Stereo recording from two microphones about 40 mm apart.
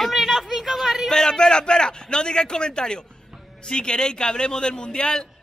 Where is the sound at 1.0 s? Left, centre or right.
Centre.